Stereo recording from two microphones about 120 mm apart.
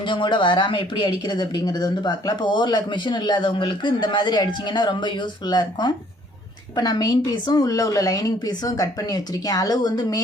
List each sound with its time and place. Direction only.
0.0 s speech: 40° left (ahead or behind)